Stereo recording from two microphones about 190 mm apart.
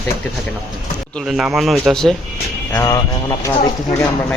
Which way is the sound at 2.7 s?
15° left (ahead or behind).